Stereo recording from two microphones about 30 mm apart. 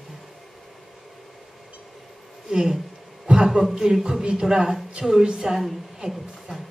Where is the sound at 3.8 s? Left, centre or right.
Right.